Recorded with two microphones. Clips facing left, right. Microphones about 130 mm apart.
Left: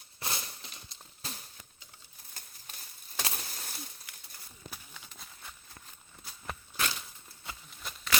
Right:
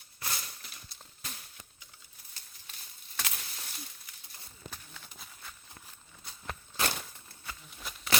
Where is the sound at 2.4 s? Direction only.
50° left (ahead or behind).